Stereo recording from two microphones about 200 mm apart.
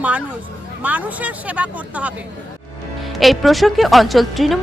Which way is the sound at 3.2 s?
Centre (ahead or behind).